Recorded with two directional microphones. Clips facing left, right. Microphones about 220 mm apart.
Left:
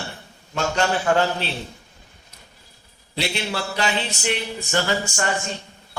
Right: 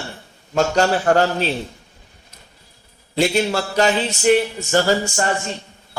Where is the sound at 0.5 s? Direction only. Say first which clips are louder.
Right 5 dB; 40° right (ahead or behind).